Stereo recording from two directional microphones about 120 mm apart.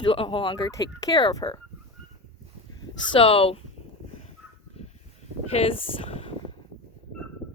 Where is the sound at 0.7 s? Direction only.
30° left (ahead or behind).